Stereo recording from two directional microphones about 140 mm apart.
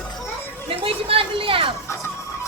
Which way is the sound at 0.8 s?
40° right (ahead or behind).